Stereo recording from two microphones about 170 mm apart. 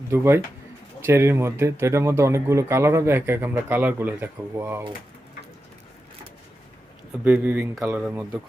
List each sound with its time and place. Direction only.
0.1 s speech: 15° right (ahead or behind)
7.3 s speech: 10° right (ahead or behind)